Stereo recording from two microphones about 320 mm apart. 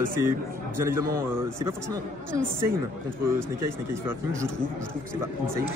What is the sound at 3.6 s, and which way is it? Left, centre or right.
Speech, centre.